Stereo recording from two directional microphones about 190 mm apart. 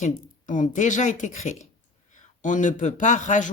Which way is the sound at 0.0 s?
40° left (ahead or behind).